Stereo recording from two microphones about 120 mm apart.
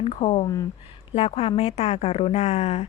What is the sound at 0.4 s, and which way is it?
Speech, 30° left (ahead or behind).